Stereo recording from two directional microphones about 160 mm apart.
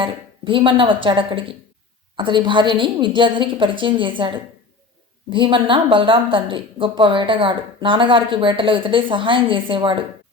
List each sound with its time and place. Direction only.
0.0 s speech: 30° right (ahead or behind)